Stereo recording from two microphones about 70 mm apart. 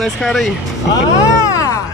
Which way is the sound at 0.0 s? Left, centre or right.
Centre.